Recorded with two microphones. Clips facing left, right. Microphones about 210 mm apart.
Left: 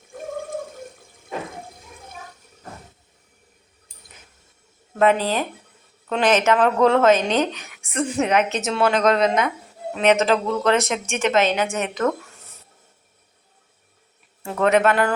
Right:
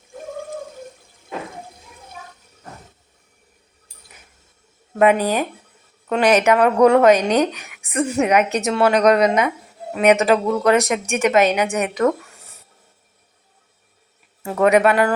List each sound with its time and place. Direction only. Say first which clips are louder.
4.9 s speech: right 3 dB; 15° right (ahead or behind)
14.4 s speech: right 3 dB; 10° right (ahead or behind)